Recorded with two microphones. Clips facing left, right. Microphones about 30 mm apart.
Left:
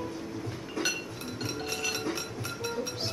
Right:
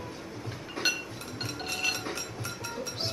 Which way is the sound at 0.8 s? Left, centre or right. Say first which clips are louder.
Right 2 dB; centre.